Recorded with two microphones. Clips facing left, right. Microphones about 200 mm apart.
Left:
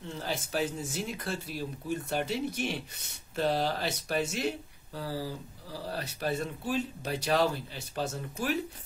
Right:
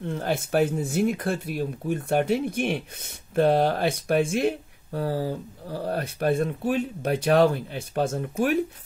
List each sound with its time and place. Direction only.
0.0 s speech: 55° right (ahead or behind)